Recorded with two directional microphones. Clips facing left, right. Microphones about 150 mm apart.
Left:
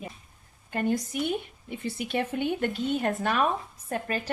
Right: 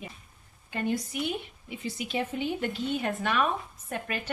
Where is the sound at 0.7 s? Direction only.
50° left (ahead or behind).